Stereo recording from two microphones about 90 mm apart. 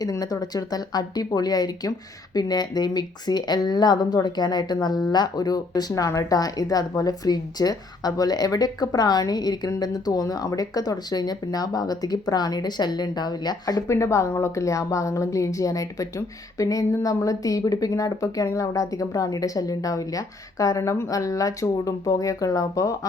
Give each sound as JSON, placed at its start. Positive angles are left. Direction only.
{"t": 0.0, "sound": "speech", "side_deg": 45}
{"t": 13.8, "sound": "a woman's voice", "side_deg": 35}